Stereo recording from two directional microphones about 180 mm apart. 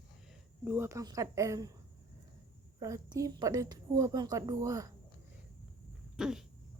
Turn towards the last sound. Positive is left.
turn(degrees=-5)  # may be behind; listen again after turning